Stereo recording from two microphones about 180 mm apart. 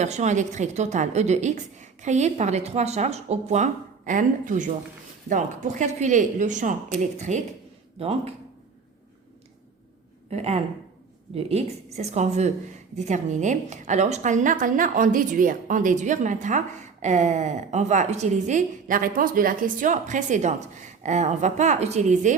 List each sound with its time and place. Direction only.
0.0 s a woman's voice: 40° right (ahead or behind)
10.2 s a woman's voice: 35° right (ahead or behind)